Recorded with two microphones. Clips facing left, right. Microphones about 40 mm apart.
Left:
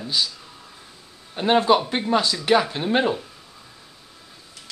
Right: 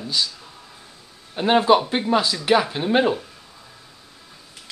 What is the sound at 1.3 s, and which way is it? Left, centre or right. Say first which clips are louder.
Speech: right 1 dB; centre.